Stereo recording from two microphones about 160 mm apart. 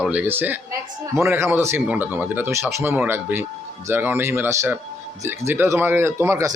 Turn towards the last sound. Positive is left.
turn(degrees=-15)  # may be behind; listen again after turning